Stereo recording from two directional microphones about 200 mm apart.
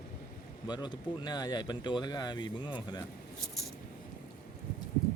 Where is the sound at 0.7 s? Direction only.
20° left (ahead or behind).